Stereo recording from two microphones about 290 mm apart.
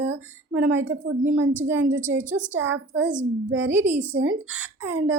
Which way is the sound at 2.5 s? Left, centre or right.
Right.